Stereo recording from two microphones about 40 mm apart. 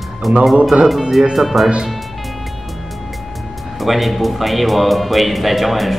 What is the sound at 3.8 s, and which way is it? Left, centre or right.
Speech, centre.